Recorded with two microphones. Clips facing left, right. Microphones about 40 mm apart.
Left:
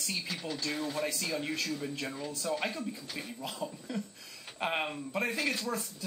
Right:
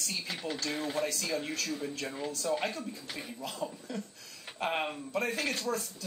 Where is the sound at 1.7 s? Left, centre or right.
Centre.